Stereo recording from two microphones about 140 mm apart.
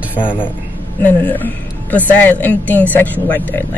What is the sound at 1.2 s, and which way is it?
Speech, 10° left (ahead or behind).